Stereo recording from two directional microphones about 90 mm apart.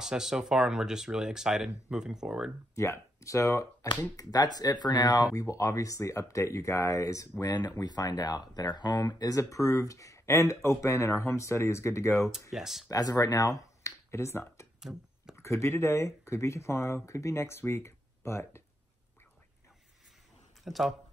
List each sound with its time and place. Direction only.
0.0 s speech: 5° right (ahead or behind)
2.7 s speech: 35° left (ahead or behind)
12.3 s speech: 5° right (ahead or behind)
12.9 s speech: 45° left (ahead or behind); by 14.7 s 30° left (ahead or behind)
14.8 s a sound: 5° right (ahead or behind)
15.3 s speech: 30° left (ahead or behind)
20.6 s speech: centre (ahead or behind)